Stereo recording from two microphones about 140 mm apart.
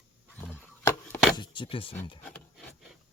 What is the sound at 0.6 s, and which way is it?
Chop, 15° left (ahead or behind).